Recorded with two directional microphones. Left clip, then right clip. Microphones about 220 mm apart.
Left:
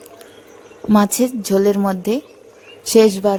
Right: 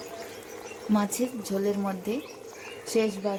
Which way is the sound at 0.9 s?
50° left (ahead or behind).